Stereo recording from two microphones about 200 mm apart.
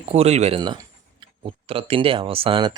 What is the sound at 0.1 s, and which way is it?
Speech, 30° right (ahead or behind).